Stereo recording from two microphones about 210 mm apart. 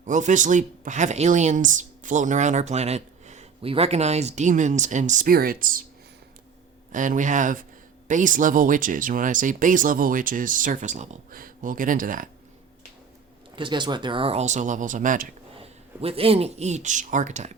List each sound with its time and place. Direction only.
0.0 s speech: 35° right (ahead or behind)
6.9 s speech: 40° right (ahead or behind)
13.6 s speech: 20° right (ahead or behind); by 15.3 s 40° right (ahead or behind)
15.5 s speech: 25° right (ahead or behind)